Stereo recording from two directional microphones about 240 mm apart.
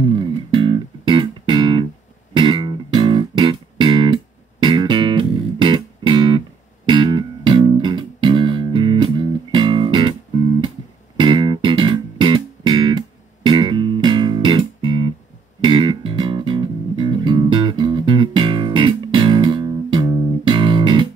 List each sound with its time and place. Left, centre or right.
0.0 s music: centre
11.1 s music: centre